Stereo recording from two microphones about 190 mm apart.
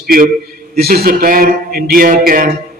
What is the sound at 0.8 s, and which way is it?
A man's voice, 55° right (ahead or behind).